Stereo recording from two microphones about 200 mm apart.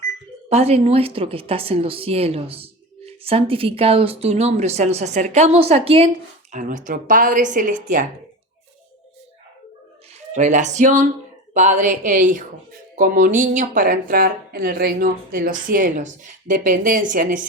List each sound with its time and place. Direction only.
0.5 s speech: 30° right (ahead or behind)
10.3 s speech: 35° right (ahead or behind)